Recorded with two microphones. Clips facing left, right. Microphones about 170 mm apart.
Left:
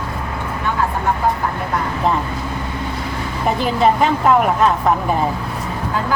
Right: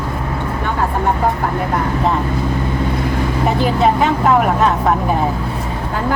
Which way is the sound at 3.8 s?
Centre (ahead or behind).